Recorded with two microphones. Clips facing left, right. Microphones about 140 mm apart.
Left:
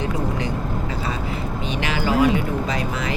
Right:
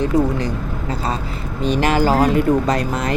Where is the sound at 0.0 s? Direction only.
35° right (ahead or behind).